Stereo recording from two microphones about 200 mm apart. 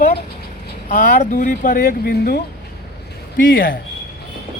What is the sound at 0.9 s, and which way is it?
Speech, 45° left (ahead or behind).